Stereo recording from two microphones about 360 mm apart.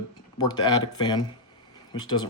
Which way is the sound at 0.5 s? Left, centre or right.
Centre.